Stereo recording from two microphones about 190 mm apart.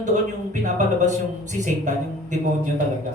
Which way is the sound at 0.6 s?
40° right (ahead or behind).